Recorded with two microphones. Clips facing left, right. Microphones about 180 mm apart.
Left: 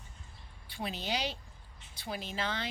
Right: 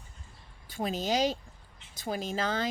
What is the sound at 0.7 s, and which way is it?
A woman's voice, 45° right (ahead or behind).